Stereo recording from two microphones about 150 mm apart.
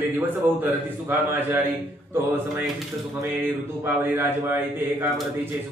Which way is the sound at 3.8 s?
15° right (ahead or behind).